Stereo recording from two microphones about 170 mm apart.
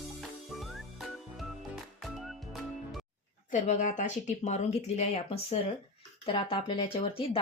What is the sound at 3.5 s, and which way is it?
Speech, 45° left (ahead or behind).